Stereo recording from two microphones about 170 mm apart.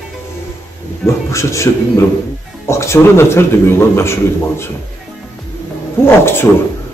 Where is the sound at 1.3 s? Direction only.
15° left (ahead or behind).